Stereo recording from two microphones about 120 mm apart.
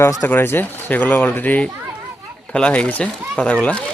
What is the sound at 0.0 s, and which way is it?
Speech, 20° left (ahead or behind).